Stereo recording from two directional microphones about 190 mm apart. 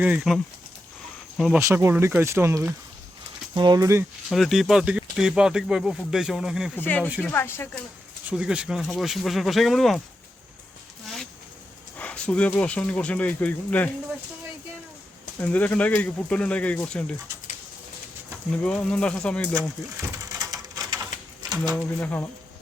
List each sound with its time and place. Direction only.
0.0 s speech: 5° right (ahead or behind)
1.5 s speech: 15° right (ahead or behind)
4.3 s speech: centre (ahead or behind)
6.7 s speech: 10° left (ahead or behind)
8.3 s speech: 5° right (ahead or behind)
11.0 s a sound: centre (ahead or behind)
11.9 s speech: 5° left (ahead or behind)
15.4 s speech: 10° left (ahead or behind)
18.5 s speech: 5° left (ahead or behind)
19.5 s pigeon: 20° right (ahead or behind)
21.8 s speech: 10° left (ahead or behind)